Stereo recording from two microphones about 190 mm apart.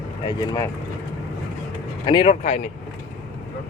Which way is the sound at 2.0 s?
30° left (ahead or behind).